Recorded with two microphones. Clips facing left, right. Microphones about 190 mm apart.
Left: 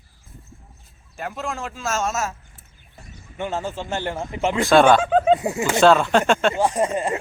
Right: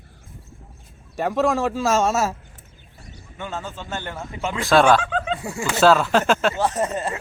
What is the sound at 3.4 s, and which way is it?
Speech, 15° left (ahead or behind).